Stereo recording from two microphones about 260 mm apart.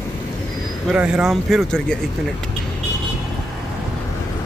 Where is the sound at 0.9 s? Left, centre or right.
Centre.